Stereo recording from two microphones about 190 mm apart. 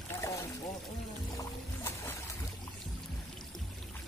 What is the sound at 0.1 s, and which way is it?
Pour, 15° left (ahead or behind).